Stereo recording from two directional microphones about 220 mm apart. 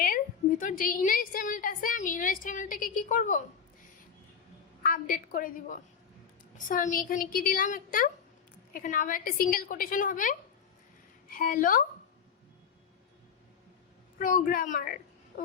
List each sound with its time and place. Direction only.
0.6 s a woman's voice: 40° left (ahead or behind)
4.8 s a woman's voice: 40° left (ahead or behind)
14.2 s a woman's voice: 35° left (ahead or behind)